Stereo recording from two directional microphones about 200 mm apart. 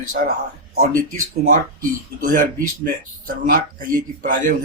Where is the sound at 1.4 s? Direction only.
45° right (ahead or behind).